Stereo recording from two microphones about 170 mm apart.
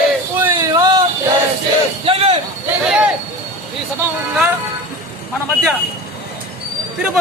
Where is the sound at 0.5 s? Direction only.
20° right (ahead or behind).